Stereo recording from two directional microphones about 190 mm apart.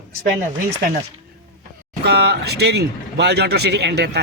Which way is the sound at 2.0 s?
60° right (ahead or behind).